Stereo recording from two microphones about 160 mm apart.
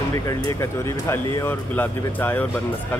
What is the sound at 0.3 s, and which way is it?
Speech, 20° left (ahead or behind).